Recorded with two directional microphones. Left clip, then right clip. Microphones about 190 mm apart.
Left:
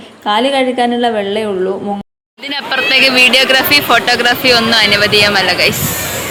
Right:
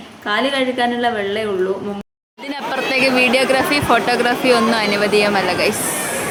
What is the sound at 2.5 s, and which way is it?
Speech, 5° right (ahead or behind).